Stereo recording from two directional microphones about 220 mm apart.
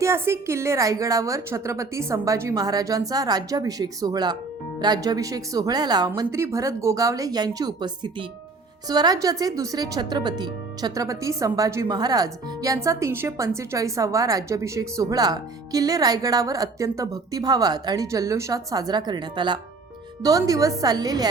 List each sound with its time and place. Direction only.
0.0 s speech: 10° right (ahead or behind)